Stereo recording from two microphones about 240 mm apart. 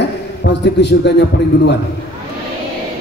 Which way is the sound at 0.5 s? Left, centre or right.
Left.